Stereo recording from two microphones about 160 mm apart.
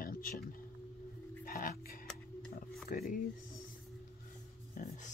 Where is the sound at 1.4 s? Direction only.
60° left (ahead or behind).